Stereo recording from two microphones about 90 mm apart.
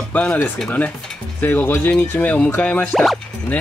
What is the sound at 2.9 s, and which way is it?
Speech, 5° left (ahead or behind).